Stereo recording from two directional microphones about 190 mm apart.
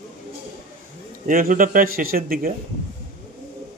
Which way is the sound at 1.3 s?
45° right (ahead or behind).